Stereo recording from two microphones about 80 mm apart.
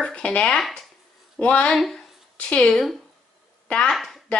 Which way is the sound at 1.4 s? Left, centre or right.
Centre.